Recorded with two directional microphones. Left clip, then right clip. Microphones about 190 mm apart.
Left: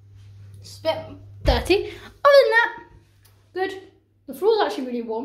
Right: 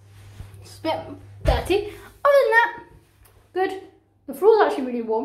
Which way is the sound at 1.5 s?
40° left (ahead or behind).